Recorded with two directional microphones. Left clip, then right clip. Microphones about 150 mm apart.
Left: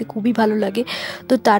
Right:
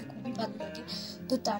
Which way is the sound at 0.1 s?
55° left (ahead or behind).